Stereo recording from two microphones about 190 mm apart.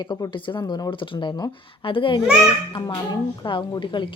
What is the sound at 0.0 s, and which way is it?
Speech, 25° left (ahead or behind).